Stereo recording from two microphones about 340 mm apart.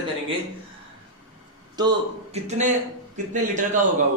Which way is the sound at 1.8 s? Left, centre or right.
Centre.